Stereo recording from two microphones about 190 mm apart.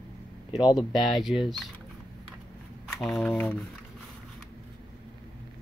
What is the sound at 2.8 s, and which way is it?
Speech, centre (ahead or behind).